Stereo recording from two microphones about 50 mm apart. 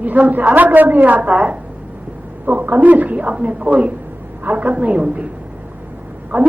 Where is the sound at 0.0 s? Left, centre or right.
Right.